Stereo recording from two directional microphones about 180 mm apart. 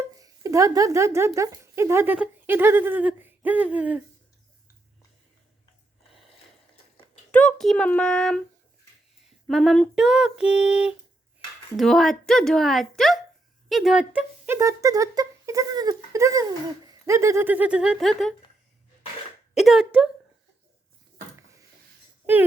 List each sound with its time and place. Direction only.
0.0 s speech: 20° right (ahead or behind)
7.3 s female singing: 5° left (ahead or behind)
9.5 s female singing: centre (ahead or behind)
13.7 s speech: centre (ahead or behind)
19.5 s a sound: centre (ahead or behind)